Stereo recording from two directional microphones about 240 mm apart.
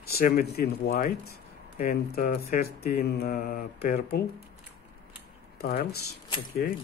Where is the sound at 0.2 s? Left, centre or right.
Left.